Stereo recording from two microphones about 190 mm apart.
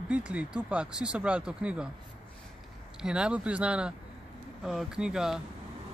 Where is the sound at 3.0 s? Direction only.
5° right (ahead or behind).